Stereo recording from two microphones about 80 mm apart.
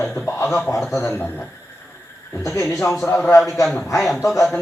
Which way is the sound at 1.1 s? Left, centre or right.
Left.